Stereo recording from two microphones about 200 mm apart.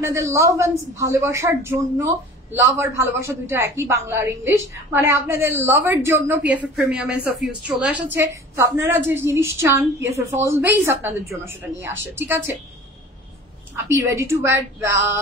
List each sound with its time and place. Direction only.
0.0 s a woman's voice: 15° right (ahead or behind)
13.8 s a woman's voice: 15° right (ahead or behind)